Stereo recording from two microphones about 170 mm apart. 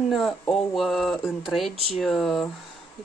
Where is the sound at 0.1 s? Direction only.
Centre (ahead or behind).